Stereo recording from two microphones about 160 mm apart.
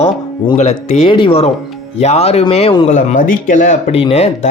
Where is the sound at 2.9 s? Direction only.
50° left (ahead or behind).